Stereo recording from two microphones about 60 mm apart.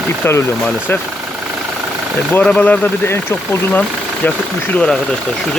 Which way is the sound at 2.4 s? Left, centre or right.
Centre.